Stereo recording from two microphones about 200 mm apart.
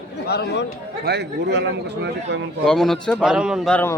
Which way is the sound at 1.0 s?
55° right (ahead or behind).